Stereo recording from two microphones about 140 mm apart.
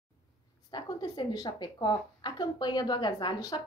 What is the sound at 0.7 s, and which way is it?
A woman's voice, 30° left (ahead or behind).